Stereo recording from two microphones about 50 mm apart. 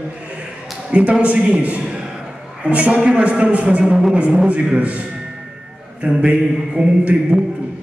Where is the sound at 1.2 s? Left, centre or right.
Right.